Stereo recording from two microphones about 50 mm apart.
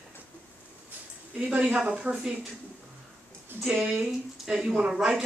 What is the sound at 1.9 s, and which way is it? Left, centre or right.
Speech, right.